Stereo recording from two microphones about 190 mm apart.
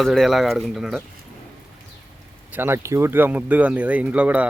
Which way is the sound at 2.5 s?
10° right (ahead or behind).